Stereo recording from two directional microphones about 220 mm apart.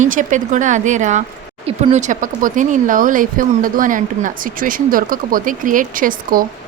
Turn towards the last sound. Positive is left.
turn(degrees=-40)  # may be behind; listen again after turning